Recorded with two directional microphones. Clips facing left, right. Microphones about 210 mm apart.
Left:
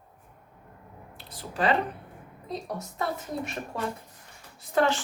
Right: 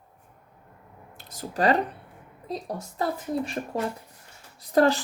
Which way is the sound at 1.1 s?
45° right (ahead or behind).